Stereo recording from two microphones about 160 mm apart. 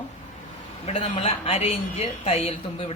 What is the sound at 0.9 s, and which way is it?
A woman's voice, 35° left (ahead or behind).